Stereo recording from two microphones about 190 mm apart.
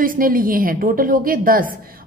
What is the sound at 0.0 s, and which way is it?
A woman's voice, 50° right (ahead or behind).